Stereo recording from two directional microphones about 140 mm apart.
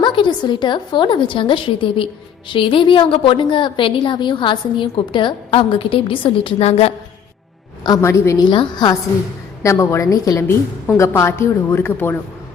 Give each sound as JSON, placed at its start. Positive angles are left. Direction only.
{"t": 0.0, "sound": "a woman's voice", "side_deg": 35}
{"t": 7.9, "sound": "a woman's voice", "side_deg": 25}
{"t": 8.4, "sound": "a woman's voice", "side_deg": 35}
{"t": 9.6, "sound": "a woman's voice", "side_deg": 20}